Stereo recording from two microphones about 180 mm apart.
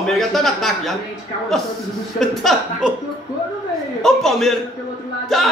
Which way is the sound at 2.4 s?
Centre (ahead or behind).